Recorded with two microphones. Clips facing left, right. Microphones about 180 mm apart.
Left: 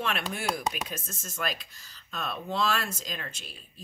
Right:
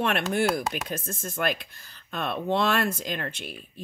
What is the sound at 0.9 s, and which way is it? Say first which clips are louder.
Speech: right 7 dB; 55° right (ahead or behind).